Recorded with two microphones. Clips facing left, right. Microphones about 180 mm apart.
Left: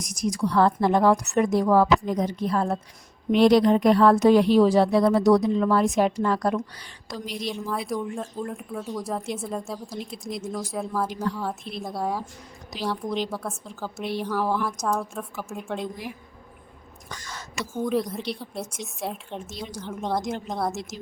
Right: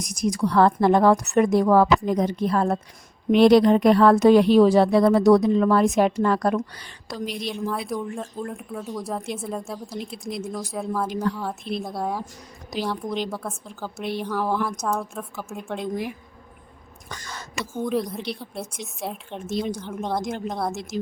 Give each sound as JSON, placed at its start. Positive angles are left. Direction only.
{"t": 0.1, "sound": "speech", "side_deg": -60}
{"t": 7.5, "sound": "speech", "side_deg": 0}
{"t": 13.9, "sound": "speech", "side_deg": -55}
{"t": 14.2, "sound": "speech", "side_deg": 5}
{"t": 17.1, "sound": "a sound", "side_deg": -60}
{"t": 17.7, "sound": "speech", "side_deg": 0}
{"t": 19.5, "sound": "speech", "side_deg": -60}
{"t": 19.8, "sound": "speech", "side_deg": 0}